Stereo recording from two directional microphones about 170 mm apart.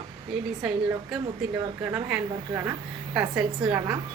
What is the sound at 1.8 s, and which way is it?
A woman's voice, 15° right (ahead or behind).